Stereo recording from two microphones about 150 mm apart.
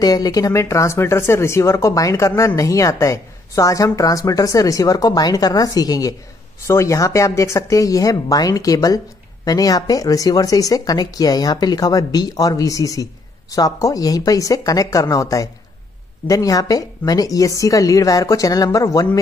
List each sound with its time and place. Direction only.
0.0 s speech: 25° left (ahead or behind)